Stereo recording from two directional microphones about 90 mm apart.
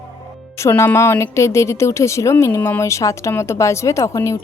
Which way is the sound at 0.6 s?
30° left (ahead or behind).